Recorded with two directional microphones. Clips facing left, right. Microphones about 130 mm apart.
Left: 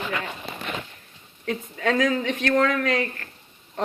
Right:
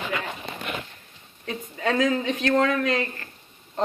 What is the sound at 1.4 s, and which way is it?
Speech, 20° right (ahead or behind).